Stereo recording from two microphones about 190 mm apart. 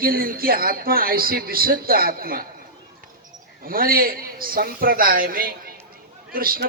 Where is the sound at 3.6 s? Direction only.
50° right (ahead or behind).